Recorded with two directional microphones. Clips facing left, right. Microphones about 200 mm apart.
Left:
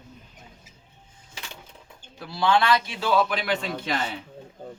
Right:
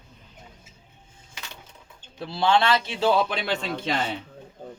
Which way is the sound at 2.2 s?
25° right (ahead or behind).